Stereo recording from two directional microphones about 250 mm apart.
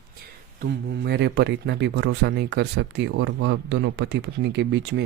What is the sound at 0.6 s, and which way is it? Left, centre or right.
Speech, right.